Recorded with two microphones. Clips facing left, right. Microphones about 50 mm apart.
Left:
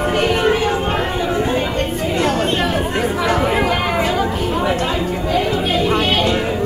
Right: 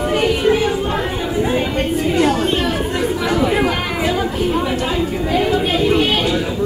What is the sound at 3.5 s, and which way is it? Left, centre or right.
Chatter, centre.